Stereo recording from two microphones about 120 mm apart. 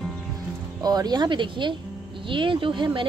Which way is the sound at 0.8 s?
35° right (ahead or behind).